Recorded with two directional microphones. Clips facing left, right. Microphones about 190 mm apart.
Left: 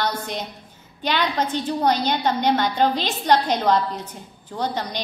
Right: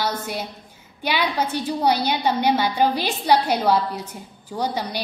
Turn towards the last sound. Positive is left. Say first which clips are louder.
# right 1 dB
turn(degrees=-10)  # may be behind; listen again after turning